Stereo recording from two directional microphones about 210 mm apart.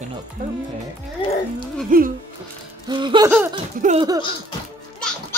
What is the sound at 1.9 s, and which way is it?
Speech, 40° right (ahead or behind).